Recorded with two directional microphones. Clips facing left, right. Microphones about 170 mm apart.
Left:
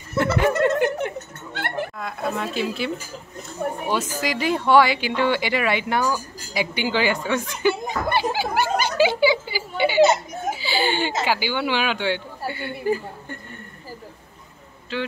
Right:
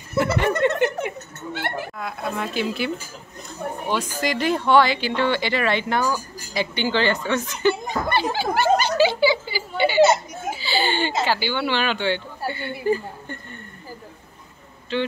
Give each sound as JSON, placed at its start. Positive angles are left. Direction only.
{"t": 0.2, "sound": "speech", "side_deg": 0}
{"t": 1.5, "sound": "speech", "side_deg": 55}
{"t": 2.0, "sound": "speech", "side_deg": 0}
{"t": 10.6, "sound": "a sound", "side_deg": 10}
{"t": 11.2, "sound": "speech", "side_deg": 10}
{"t": 14.9, "sound": "speech", "side_deg": 5}